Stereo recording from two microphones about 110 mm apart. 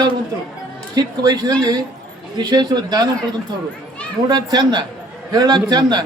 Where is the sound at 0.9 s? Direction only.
35° right (ahead or behind).